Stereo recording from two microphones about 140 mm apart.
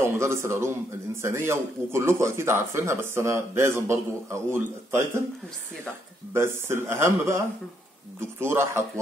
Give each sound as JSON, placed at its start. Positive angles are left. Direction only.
{"t": 0.0, "sound": "a man's voice", "side_deg": -20}
{"t": 6.3, "sound": "a man's voice", "side_deg": -15}